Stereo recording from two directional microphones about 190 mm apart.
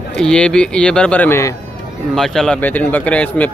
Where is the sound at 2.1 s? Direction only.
Centre (ahead or behind).